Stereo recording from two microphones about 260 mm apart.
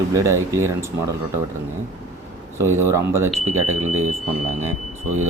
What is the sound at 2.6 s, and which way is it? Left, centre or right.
Speech, centre.